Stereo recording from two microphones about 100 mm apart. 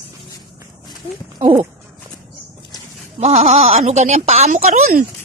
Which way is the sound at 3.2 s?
90° right.